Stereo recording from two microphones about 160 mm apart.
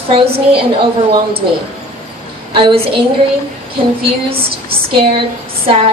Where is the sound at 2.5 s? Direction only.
30° right (ahead or behind).